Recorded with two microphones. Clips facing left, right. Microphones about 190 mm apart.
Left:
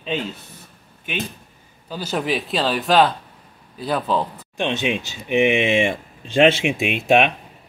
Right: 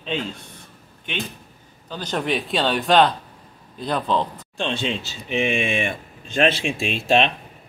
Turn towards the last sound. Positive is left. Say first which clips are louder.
# left 2 dB
turn(degrees=15)  # may be behind; listen again after turning